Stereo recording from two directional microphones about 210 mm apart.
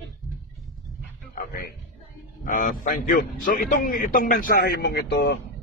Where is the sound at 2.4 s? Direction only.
40° left (ahead or behind).